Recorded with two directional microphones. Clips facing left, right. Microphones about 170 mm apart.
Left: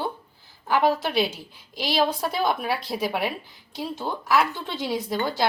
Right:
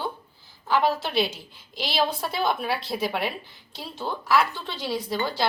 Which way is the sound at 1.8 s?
10° left (ahead or behind).